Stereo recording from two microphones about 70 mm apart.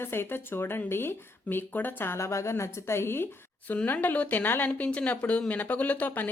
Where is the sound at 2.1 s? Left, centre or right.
Left.